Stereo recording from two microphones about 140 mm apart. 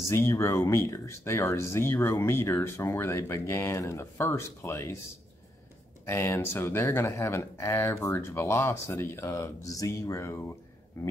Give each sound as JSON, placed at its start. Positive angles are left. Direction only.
{"t": 0.1, "sound": "speech", "side_deg": 20}
{"t": 6.0, "sound": "speech", "side_deg": 20}